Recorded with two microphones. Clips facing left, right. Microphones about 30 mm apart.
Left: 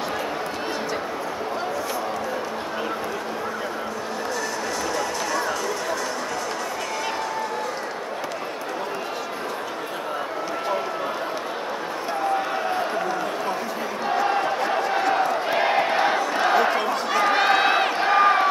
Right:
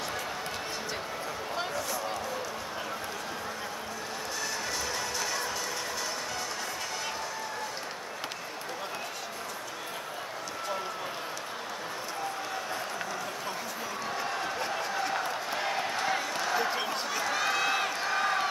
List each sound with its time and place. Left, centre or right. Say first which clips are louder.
14.0 s crowd: left 13 dB; left
17.1 s run: left 12 dB; left